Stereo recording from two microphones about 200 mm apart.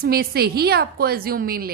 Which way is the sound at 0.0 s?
50° right (ahead or behind).